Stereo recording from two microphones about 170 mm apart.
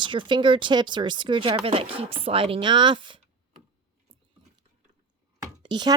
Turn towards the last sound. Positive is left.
turn(degrees=-25)  # may be behind; listen again after turning